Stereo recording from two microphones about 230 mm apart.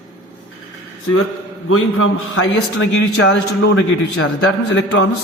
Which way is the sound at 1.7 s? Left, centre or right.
Left.